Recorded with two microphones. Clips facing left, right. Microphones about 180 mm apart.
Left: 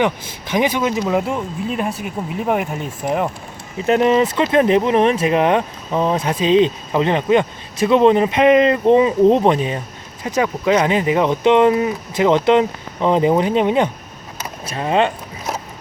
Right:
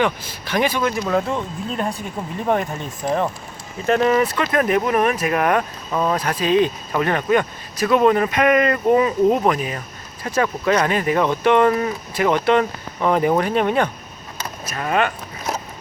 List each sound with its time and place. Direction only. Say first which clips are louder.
0.0 s speech: left 2 dB; 20° left (ahead or behind)
10.2 s speech: left 2 dB; 15° left (ahead or behind)